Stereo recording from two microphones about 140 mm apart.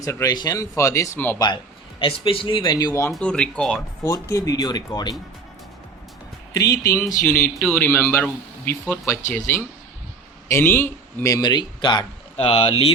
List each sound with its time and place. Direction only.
0.0 s a man's voice: 25° left (ahead or behind)
2.0 s speech: 40° left (ahead or behind); by 3.1 s 25° left (ahead or behind)
3.1 s speech: 5° left (ahead or behind)
4.0 s a man's voice: 20° left (ahead or behind)
6.6 s a man's voice: 25° left (ahead or behind); by 12.7 s 40° left (ahead or behind)